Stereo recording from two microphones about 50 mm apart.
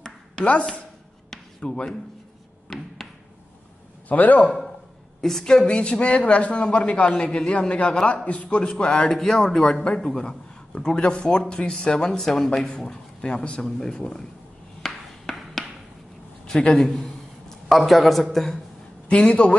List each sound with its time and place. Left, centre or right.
1.6 s speech: centre
2.7 s a sound: centre
4.1 s a man's voice: left
5.2 s a man's voice: centre
9.2 s speech: centre
9.6 s speech: centre
14.8 s a sound: centre
16.4 s a man's voice: centre
16.8 s a sound: centre
17.6 s a man's voice: centre
19.0 s a man's voice: left